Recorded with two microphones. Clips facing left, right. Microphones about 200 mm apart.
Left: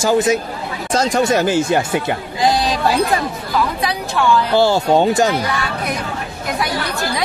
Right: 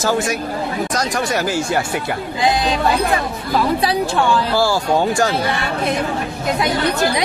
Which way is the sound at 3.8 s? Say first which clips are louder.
Right 2 dB; 30° right (ahead or behind).